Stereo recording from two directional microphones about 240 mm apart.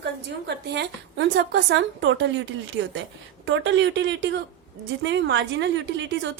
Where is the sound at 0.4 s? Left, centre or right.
Right.